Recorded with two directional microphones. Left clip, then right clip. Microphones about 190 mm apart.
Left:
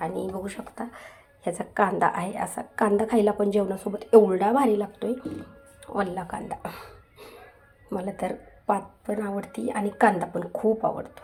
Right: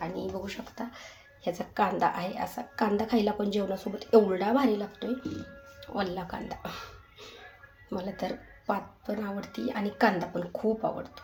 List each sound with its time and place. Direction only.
0.0 s a woman's voice: 30° left (ahead or behind)
7.9 s a woman's voice: 25° left (ahead or behind)